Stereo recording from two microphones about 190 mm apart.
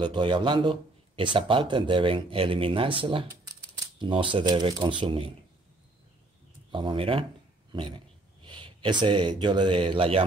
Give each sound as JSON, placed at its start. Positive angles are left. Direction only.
{"t": 0.0, "sound": "a man's voice", "side_deg": -25}
{"t": 6.7, "sound": "a man's voice", "side_deg": -25}
{"t": 8.5, "sound": "speech", "side_deg": -25}